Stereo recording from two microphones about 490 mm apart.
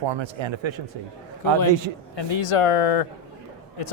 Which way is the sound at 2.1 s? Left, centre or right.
Left.